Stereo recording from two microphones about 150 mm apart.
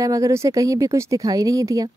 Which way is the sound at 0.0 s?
20° right (ahead or behind).